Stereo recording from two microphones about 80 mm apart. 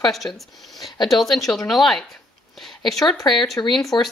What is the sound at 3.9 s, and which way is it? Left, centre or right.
Speech, left.